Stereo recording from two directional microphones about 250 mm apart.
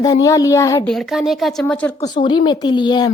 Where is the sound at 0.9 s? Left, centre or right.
Centre.